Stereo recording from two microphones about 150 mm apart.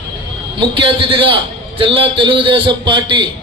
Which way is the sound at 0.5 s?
35° right (ahead or behind).